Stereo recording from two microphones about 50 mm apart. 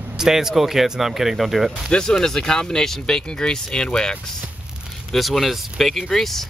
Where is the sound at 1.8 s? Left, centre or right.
Centre.